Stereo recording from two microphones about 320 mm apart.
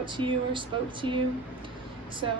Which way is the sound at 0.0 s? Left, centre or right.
Centre.